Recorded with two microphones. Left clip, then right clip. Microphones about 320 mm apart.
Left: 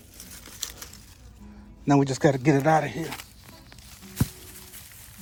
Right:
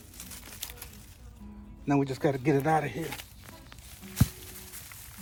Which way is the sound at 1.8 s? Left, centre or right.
Left.